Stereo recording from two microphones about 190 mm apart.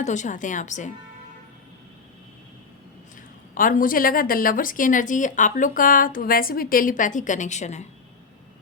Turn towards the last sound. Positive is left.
turn(degrees=35)  # may be behind; listen again after turning